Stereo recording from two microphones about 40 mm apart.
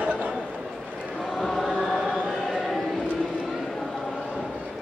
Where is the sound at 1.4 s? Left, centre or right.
Centre.